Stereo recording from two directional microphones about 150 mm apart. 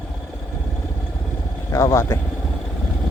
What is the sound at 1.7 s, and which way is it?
Speech, 20° left (ahead or behind).